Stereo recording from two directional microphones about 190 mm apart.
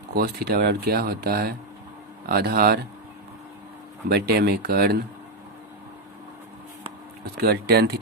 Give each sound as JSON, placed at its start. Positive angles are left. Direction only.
{"t": 0.1, "sound": "speech", "side_deg": -55}
{"t": 4.1, "sound": "speech", "side_deg": -55}
{"t": 7.4, "sound": "speech", "side_deg": -55}